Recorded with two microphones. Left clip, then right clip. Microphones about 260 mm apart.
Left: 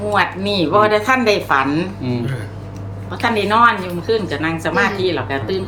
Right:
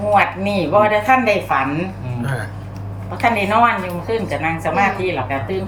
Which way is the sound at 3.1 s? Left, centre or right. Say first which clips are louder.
Even; centre.